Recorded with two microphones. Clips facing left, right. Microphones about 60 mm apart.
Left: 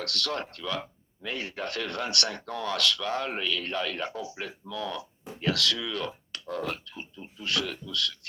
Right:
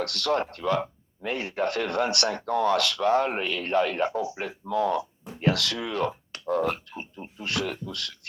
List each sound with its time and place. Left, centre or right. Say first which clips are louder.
0.0 s speech: right 6 dB; right